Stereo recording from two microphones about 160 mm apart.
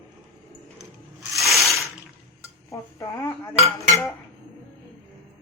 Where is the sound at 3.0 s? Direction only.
15° left (ahead or behind).